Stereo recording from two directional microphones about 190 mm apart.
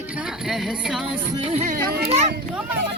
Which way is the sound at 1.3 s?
30° right (ahead or behind).